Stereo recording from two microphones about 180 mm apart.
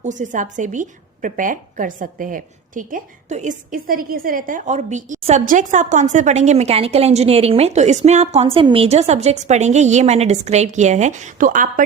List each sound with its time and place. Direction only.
0.0 s speech: 45° right (ahead or behind)